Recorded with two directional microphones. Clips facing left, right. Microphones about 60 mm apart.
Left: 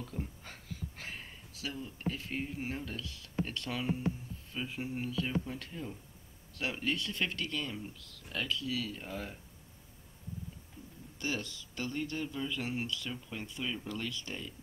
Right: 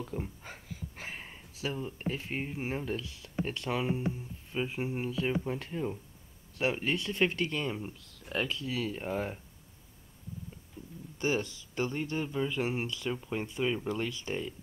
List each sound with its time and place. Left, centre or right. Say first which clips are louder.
0.0 s speech: right 4 dB; centre
11.1 s speech: right 6 dB; right